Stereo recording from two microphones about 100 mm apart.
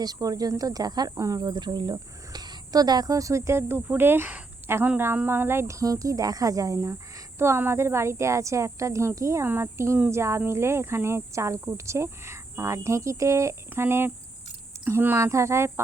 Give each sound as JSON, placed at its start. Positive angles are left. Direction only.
{"t": 0.0, "sound": "speech", "side_deg": -40}